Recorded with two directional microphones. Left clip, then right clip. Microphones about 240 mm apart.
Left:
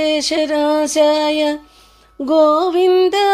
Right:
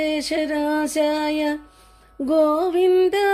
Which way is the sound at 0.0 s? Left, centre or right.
Centre.